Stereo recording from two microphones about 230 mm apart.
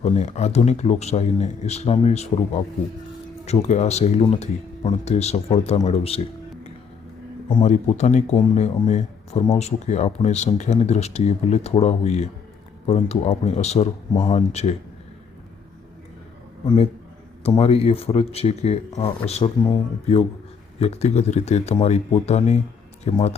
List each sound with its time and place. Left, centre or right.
0.0 s a man's voice: left
7.6 s a man's voice: left
16.6 s a man's voice: left